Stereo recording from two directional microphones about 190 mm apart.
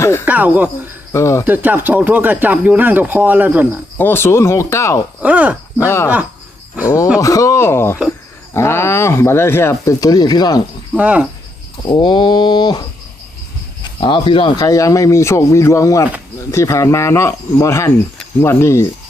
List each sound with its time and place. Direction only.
0.0 s a sound: 15° left (ahead or behind)
0.3 s speech: 10° right (ahead or behind)
1.1 s speech: 15° left (ahead or behind)
1.5 s speech: 10° right (ahead or behind)
3.9 s speech: 10° left (ahead or behind)
5.2 s speech: 5° right (ahead or behind)
5.7 s speech: 15° left (ahead or behind)
7.2 s speech: 15° left (ahead or behind)
10.9 s speech: 5° right (ahead or behind)
11.9 s mantra: 25° left (ahead or behind)
13.8 s speech: 25° left (ahead or behind)